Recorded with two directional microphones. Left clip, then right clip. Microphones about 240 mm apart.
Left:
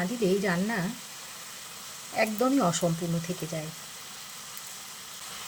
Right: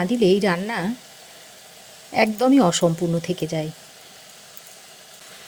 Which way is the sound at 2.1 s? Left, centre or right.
Right.